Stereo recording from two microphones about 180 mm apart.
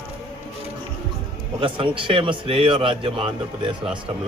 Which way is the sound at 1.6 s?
30° right (ahead or behind).